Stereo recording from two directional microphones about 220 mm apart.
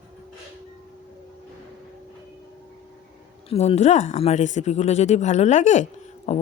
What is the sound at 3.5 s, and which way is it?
Speech, 30° left (ahead or behind).